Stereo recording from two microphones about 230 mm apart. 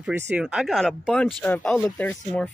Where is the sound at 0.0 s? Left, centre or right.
Centre.